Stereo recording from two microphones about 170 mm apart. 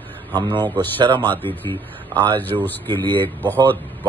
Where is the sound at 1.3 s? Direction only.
10° left (ahead or behind).